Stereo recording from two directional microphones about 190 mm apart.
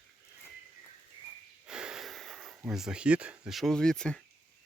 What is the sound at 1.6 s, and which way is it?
Sniff, 5° right (ahead or behind).